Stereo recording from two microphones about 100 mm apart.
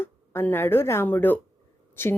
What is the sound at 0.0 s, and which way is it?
Speech, 20° left (ahead or behind).